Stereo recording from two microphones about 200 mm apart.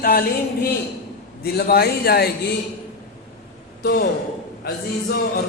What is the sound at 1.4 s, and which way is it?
Speech, 50° left (ahead or behind).